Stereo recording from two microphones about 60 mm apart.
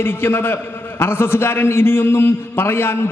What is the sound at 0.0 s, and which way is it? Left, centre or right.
A man's voice, left.